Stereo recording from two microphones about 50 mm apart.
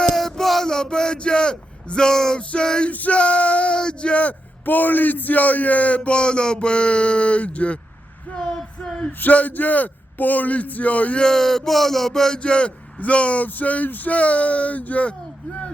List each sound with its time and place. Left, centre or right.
0.0 s a sound: centre
2.4 s a man's voice: left
2.9 s a man's voice: left
3.2 s male singing: left
4.6 s a man's voice: left
9.2 s a man's voice: left
11.2 s speech: centre
12.4 s a man's voice: centre